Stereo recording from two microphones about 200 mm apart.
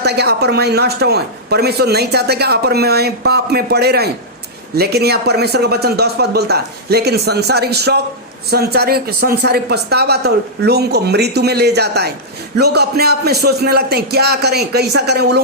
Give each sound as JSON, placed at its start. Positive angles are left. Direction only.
{"t": 0.0, "sound": "speech", "side_deg": -55}